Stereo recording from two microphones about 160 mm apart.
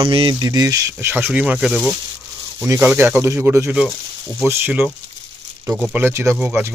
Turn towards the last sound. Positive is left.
turn(degrees=-10)  # may be behind; listen again after turning